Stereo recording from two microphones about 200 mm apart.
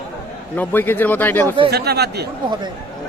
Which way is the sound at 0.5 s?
10° left (ahead or behind).